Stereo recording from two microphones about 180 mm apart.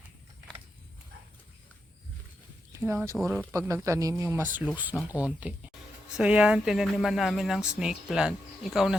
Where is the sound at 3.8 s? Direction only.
15° right (ahead or behind).